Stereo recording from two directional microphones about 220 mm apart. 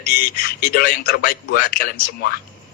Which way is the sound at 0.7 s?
40° left (ahead or behind).